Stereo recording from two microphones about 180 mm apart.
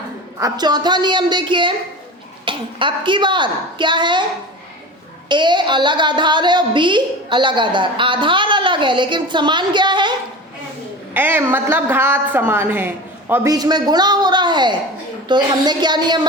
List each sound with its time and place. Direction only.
0.3 s a woman's voice: 20° right (ahead or behind)
5.3 s a woman's voice: 25° right (ahead or behind)
11.1 s a woman's voice: 10° right (ahead or behind)